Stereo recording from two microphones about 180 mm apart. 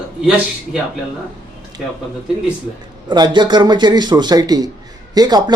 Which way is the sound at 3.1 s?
25° right (ahead or behind).